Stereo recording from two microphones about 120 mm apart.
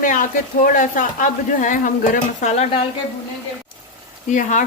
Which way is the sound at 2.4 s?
70° left (ahead or behind).